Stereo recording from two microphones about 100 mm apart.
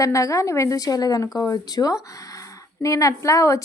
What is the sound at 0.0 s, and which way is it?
A woman's voice, 35° left (ahead or behind).